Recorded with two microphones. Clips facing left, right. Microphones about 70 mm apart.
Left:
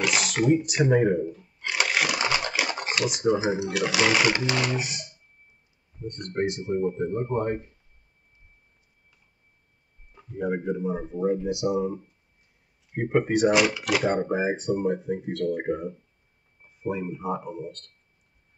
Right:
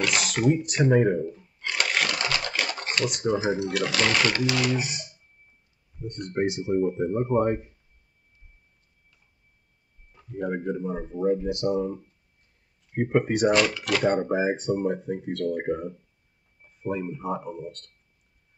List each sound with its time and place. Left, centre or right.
0.0 s speech: centre
1.6 s a sound: centre
2.9 s speech: centre
4.5 s speech: left
4.7 s speech: centre
6.0 s speech: centre
10.3 s speech: centre